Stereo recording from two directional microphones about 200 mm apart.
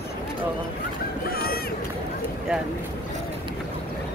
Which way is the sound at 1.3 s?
50° left (ahead or behind).